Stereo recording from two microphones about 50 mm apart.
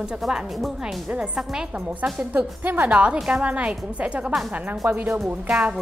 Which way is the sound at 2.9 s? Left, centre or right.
Right.